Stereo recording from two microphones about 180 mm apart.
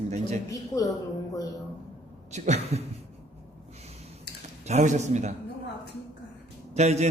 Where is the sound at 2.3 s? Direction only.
40° right (ahead or behind).